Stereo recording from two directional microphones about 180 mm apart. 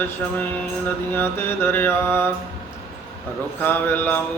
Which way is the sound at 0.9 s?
10° left (ahead or behind).